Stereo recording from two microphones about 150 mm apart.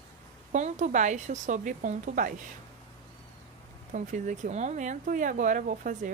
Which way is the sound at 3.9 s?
55° right (ahead or behind).